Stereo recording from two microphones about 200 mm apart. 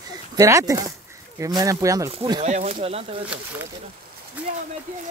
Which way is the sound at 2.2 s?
30° right (ahead or behind).